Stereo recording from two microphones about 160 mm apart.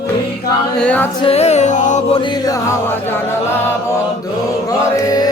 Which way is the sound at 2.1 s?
30° left (ahead or behind).